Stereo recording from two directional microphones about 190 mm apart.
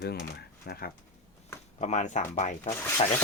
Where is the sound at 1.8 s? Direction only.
40° left (ahead or behind).